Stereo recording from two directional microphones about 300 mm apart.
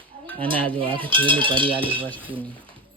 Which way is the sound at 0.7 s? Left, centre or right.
Centre.